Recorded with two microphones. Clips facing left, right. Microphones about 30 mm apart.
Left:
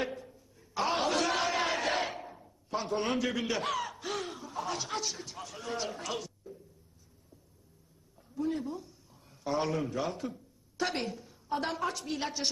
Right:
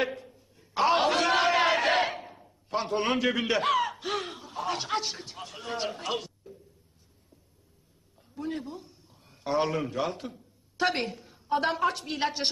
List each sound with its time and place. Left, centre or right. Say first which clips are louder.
0.0 s a sound: right 5 dB; right
2.7 s a man's voice: right 4 dB; right
8.2 s a woman's voice: left 1 dB; right